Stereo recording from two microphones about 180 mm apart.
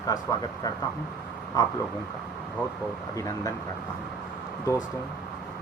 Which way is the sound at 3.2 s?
20° left (ahead or behind).